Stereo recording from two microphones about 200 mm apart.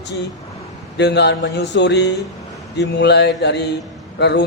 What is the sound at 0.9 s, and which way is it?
Speech, 60° left (ahead or behind).